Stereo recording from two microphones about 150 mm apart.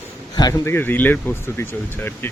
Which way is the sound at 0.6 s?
15° left (ahead or behind).